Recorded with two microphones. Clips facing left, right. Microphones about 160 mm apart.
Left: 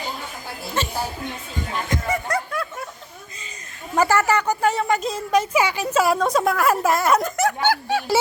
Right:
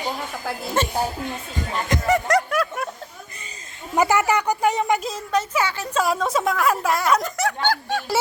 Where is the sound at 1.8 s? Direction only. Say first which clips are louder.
Right 7 dB; 85° right.